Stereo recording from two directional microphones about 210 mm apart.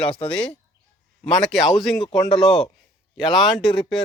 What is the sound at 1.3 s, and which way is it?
Speech, centre (ahead or behind).